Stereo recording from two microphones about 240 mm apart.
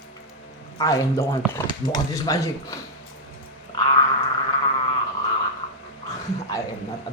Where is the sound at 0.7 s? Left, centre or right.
Centre.